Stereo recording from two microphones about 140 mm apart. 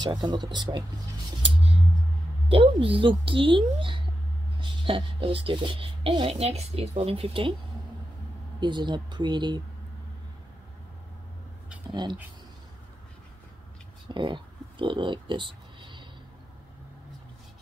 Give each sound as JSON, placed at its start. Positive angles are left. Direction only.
{"t": 0.0, "sound": "speech", "side_deg": -30}
{"t": 2.5, "sound": "speech", "side_deg": -40}
{"t": 8.5, "sound": "speech", "side_deg": -35}
{"t": 11.9, "sound": "speech", "side_deg": -30}
{"t": 14.1, "sound": "a sound", "side_deg": -35}